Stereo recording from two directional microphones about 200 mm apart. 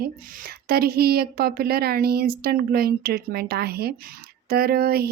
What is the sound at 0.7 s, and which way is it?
Speech, 50° right (ahead or behind).